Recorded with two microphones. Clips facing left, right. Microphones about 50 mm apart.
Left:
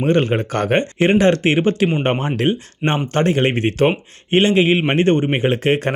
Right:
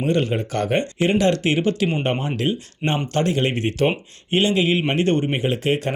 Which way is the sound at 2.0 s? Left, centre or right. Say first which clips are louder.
Left 4 dB; left.